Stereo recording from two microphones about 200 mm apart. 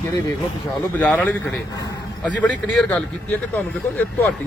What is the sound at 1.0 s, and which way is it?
Speech, 10° left (ahead or behind).